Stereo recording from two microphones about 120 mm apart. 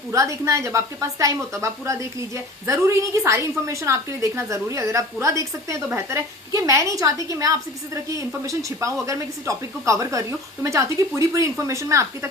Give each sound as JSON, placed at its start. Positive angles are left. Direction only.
{"t": 0.1, "sound": "a woman's voice", "side_deg": -25}